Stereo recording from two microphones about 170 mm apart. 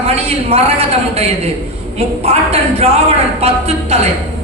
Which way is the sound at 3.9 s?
40° right (ahead or behind).